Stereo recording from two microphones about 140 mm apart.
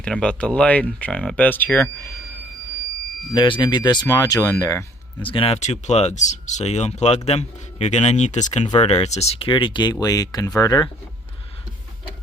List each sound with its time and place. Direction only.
0.0 s speech: 5° left (ahead or behind)
3.3 s speech: 35° left (ahead or behind)
5.2 s speech: 40° left (ahead or behind)
5.5 s speech: 55° left (ahead or behind); by 10.9 s 30° left (ahead or behind)